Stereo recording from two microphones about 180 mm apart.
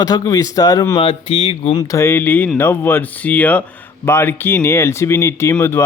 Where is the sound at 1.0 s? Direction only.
35° left (ahead or behind).